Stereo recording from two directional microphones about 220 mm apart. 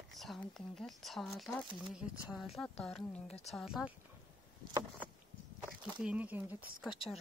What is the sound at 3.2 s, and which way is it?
Speech, 30° left (ahead or behind).